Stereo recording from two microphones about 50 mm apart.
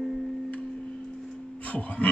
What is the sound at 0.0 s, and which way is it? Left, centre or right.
Music, centre.